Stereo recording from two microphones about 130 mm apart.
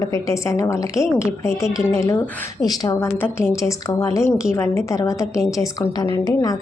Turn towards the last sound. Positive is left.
turn(degrees=30)  # may be behind; listen again after turning